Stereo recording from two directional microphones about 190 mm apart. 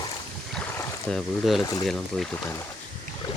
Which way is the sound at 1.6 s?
20° left (ahead or behind).